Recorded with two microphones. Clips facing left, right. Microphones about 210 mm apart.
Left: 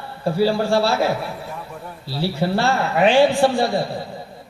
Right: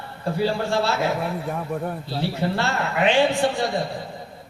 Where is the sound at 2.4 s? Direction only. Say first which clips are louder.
Left 6 dB; 35° left (ahead or behind).